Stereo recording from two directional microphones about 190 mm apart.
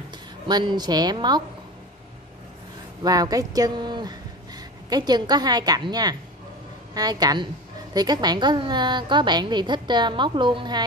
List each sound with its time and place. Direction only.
0.5 s a woman's voice: 20° right (ahead or behind)
3.0 s a woman's voice: 20° right (ahead or behind)